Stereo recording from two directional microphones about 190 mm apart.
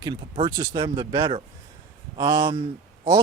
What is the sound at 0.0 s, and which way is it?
Speech, 25° right (ahead or behind).